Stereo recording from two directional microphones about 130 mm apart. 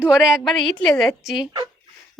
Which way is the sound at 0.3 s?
Centre (ahead or behind).